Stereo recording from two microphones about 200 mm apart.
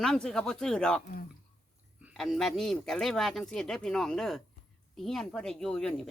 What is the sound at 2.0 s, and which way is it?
A woman's voice, centre (ahead or behind).